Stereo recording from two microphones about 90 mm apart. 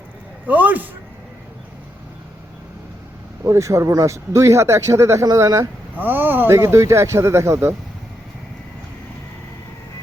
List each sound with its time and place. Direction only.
0.4 s a man's voice: 20° right (ahead or behind)
3.4 s speech: 35° right (ahead or behind)
5.2 s speech: 45° right (ahead or behind)
6.0 s speech: 20° right (ahead or behind)